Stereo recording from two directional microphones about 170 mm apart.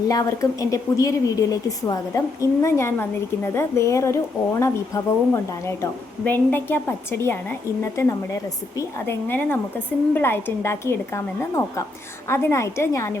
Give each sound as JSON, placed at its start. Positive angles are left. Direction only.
{"t": 0.1, "sound": "a woman's voice", "side_deg": 20}